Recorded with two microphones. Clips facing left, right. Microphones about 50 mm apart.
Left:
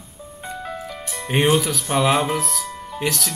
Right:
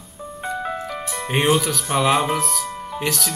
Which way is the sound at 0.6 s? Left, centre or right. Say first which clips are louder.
Right 2 dB; centre.